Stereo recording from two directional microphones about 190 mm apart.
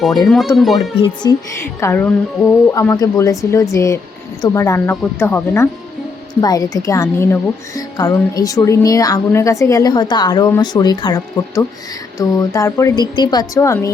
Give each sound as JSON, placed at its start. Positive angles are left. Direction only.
{"t": 0.3, "sound": "speech", "side_deg": 0}
{"t": 1.2, "sound": "speech", "side_deg": 20}